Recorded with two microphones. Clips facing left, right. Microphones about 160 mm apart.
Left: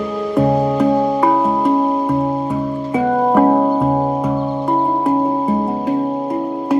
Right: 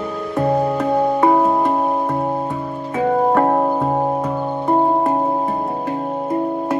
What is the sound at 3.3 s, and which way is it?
Music, 5° left (ahead or behind).